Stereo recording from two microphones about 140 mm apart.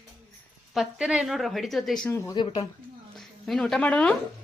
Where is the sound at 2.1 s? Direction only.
20° left (ahead or behind).